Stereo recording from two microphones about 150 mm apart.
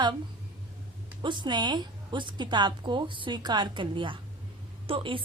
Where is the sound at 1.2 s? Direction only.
30° right (ahead or behind).